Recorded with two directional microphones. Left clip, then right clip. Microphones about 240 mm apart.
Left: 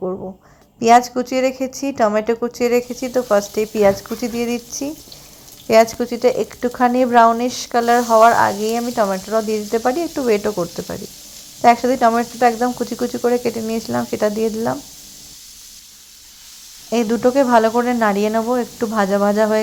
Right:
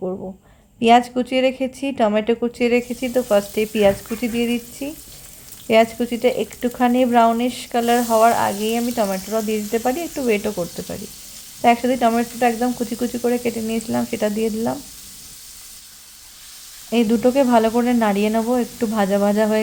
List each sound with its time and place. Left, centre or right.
0.0 s a sound: centre
0.8 s speech: centre
16.9 s speech: centre